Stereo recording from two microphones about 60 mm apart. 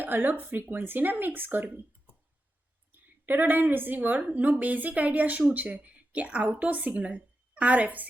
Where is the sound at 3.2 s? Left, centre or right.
Right.